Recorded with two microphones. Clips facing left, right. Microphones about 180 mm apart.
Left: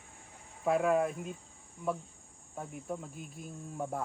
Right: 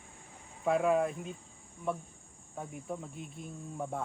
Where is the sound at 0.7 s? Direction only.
Centre (ahead or behind).